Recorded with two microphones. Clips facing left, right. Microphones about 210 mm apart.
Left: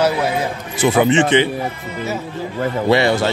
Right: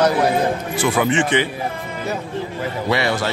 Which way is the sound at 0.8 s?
25° left (ahead or behind).